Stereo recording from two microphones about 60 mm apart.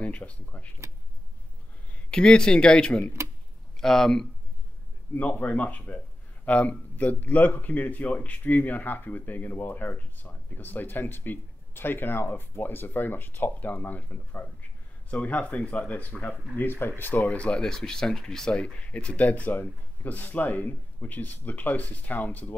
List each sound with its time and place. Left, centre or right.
0.0 s speech: left
2.0 s speech: centre
5.4 s speech: left
16.5 s speech: left
17.4 s speech: centre